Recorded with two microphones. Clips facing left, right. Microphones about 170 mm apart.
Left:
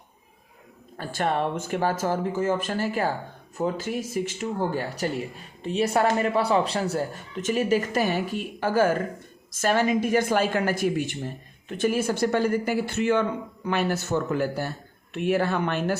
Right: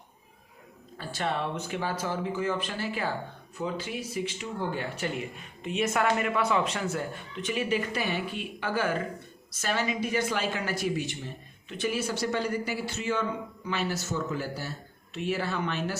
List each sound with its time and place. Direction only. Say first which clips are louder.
0.9 s speech: left 5 dB; 50° left (ahead or behind)